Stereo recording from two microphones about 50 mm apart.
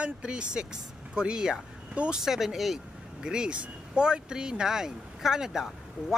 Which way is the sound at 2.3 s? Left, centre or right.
Centre.